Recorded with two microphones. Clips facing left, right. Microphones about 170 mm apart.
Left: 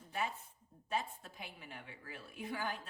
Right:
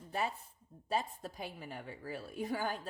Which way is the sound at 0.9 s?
40° right (ahead or behind).